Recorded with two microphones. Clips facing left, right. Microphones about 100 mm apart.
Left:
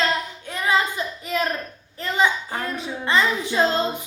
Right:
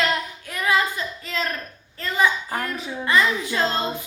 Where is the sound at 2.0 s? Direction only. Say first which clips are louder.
Left 1 dB; 20° left (ahead or behind).